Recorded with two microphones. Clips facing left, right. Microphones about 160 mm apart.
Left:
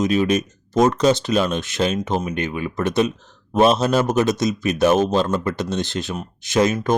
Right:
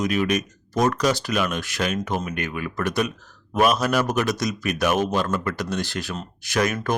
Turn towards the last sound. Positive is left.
turn(degrees=25)  # may be behind; listen again after turning